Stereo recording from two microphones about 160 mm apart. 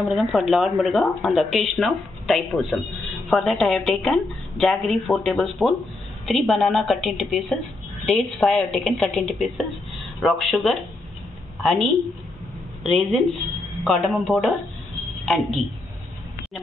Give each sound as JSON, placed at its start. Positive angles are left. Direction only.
{"t": 0.0, "sound": "speech", "side_deg": 0}